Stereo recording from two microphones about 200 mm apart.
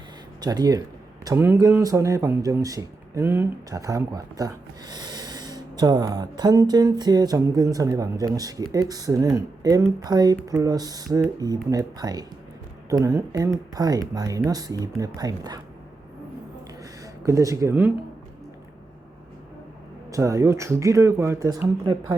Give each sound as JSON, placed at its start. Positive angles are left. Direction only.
{"t": 0.4, "sound": "speech", "side_deg": -20}
{"t": 17.2, "sound": "speech", "side_deg": -15}
{"t": 20.1, "sound": "speech", "side_deg": -15}